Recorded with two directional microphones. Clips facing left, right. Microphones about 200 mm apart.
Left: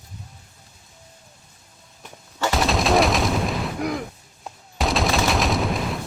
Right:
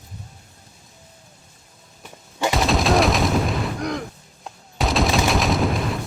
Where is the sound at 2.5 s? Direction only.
Centre (ahead or behind).